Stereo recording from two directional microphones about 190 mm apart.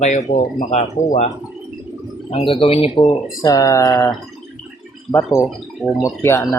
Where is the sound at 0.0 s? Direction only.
40° left (ahead or behind).